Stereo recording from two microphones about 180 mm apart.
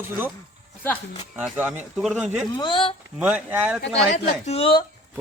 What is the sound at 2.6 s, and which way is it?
Speech, 25° left (ahead or behind).